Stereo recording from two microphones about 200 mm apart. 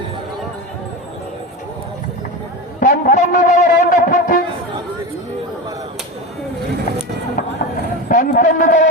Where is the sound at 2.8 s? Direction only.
40° left (ahead or behind).